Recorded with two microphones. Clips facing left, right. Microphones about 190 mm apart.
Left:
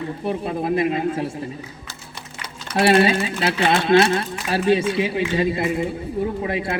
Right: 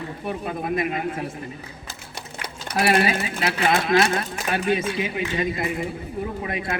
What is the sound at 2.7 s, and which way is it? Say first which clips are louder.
Speech: left 4 dB; 30° left (ahead or behind).